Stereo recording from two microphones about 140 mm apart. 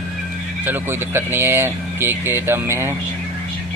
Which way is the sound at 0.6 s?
15° right (ahead or behind).